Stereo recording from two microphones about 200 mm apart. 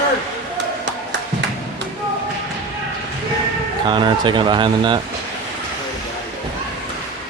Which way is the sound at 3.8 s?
25° right (ahead or behind).